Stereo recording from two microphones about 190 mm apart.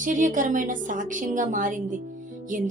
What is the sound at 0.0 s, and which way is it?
A woman's voice, 45° right (ahead or behind).